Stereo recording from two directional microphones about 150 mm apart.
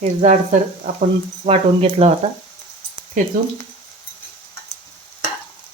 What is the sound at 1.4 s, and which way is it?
Speech, 40° right (ahead or behind).